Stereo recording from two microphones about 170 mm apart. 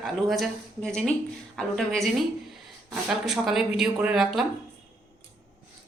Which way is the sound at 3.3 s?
Centre (ahead or behind).